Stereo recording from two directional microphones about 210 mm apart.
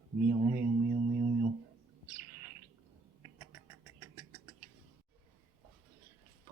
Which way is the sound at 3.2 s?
15° right (ahead or behind).